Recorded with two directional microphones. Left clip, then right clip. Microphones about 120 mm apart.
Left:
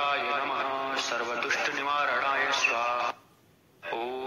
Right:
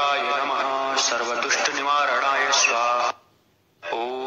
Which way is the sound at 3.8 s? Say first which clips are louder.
Right 6 dB; 40° right (ahead or behind).